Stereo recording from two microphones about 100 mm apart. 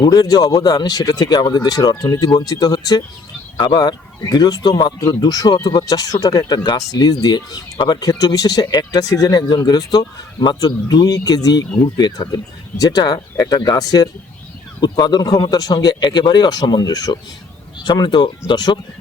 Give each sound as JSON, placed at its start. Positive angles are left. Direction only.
{"t": 0.0, "sound": "speech", "side_deg": 40}